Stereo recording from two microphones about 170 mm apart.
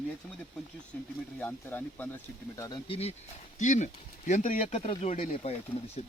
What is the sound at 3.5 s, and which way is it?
Speech, 45° left (ahead or behind).